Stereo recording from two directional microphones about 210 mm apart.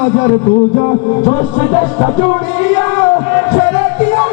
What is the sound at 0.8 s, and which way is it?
Music, 20° left (ahead or behind).